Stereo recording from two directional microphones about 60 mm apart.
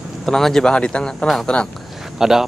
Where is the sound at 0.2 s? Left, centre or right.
Centre.